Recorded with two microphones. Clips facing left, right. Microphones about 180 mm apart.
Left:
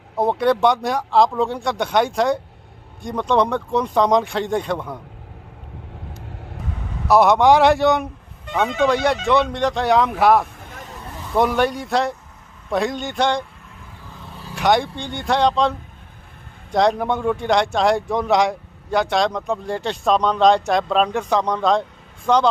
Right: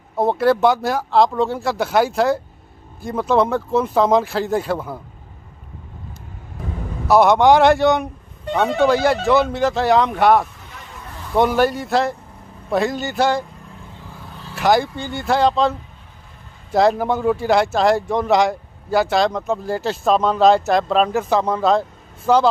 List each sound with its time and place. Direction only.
0.2 s speech: centre (ahead or behind)
7.1 s speech: centre (ahead or behind)
10.6 s vehicle: 50° left (ahead or behind)
11.3 s speech: centre (ahead or behind)
14.5 s speech: centre (ahead or behind)
16.7 s speech: centre (ahead or behind)